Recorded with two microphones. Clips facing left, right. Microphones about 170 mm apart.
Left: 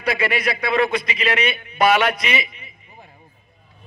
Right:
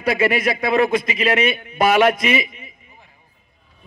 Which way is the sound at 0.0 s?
45° right (ahead or behind).